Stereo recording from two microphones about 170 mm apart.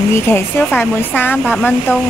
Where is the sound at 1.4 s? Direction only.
Centre (ahead or behind).